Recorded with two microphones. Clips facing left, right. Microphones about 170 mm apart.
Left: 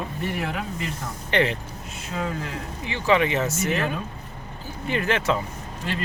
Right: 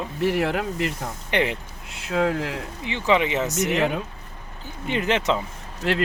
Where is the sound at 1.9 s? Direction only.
75° right (ahead or behind).